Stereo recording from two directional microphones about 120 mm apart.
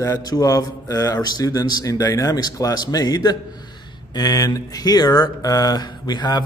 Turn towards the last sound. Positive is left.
turn(degrees=35)  # may be behind; listen again after turning